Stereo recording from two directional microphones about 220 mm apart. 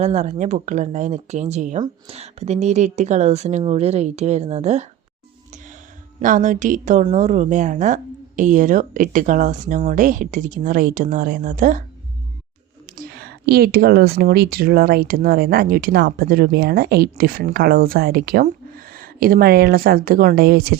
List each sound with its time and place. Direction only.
0.0 s a woman's voice: 30° right (ahead or behind)
6.1 s a woman's voice: 35° right (ahead or behind)
13.0 s speech: 45° right (ahead or behind)